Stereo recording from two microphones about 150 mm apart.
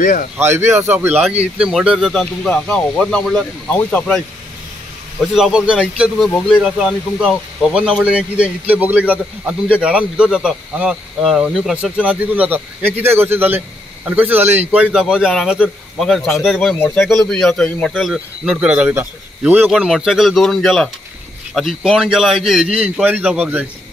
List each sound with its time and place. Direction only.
0.0 s speech: 60° left (ahead or behind)
0.4 s a man's voice: 15° right (ahead or behind); by 4.2 s 5° left (ahead or behind)
5.2 s a man's voice: 5° right (ahead or behind)
16.7 s speech: 10° left (ahead or behind); by 23.7 s 10° right (ahead or behind)